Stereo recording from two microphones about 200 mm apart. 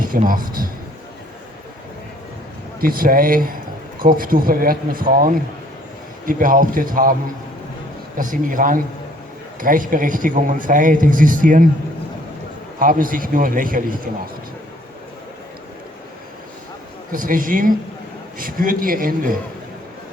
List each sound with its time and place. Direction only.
0.0 s a man's voice: 45° right (ahead or behind)
2.8 s a man's voice: 45° right (ahead or behind)
8.2 s a man's voice: 40° right (ahead or behind)
12.8 s a man's voice: 45° right (ahead or behind)
17.1 s a man's voice: 45° right (ahead or behind)